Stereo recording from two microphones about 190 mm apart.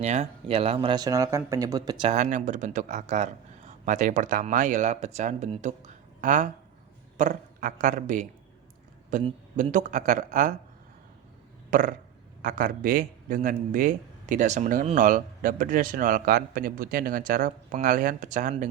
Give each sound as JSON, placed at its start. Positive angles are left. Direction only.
{"t": 0.0, "sound": "speech", "side_deg": -35}
{"t": 2.0, "sound": "speech", "side_deg": -40}
{"t": 11.7, "sound": "burping", "side_deg": -45}
{"t": 12.4, "sound": "a man's voice", "side_deg": -45}